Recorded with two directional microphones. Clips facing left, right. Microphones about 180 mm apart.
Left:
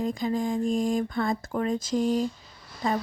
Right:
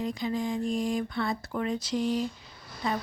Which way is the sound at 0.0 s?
45° left (ahead or behind).